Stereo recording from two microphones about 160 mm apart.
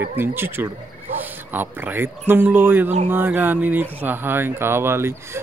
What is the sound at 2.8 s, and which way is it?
Speech, 45° right (ahead or behind).